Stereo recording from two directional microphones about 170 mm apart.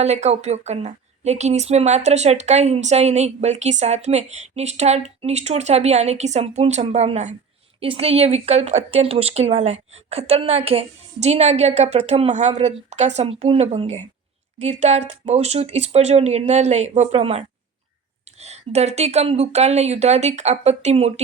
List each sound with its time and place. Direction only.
0.0 s speech: 40° right (ahead or behind)